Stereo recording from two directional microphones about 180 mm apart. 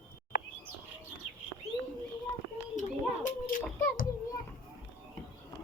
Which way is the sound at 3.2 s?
50° left (ahead or behind).